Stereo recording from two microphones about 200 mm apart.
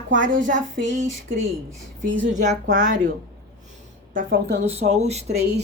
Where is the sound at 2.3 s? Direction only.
35° right (ahead or behind).